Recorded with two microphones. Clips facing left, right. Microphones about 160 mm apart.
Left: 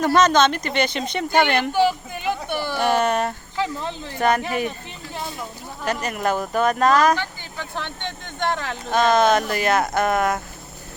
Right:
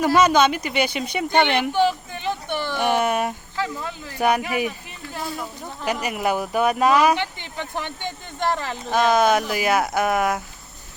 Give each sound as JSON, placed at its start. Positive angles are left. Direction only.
{"t": 0.0, "sound": "speech", "side_deg": -10}
{"t": 1.3, "sound": "speech", "side_deg": 5}
{"t": 1.7, "sound": "a sound", "side_deg": 10}
{"t": 2.8, "sound": "a sound", "side_deg": -10}
{"t": 3.6, "sound": "speech", "side_deg": 25}
{"t": 4.2, "sound": "speech", "side_deg": -10}
{"t": 5.8, "sound": "speech", "side_deg": -10}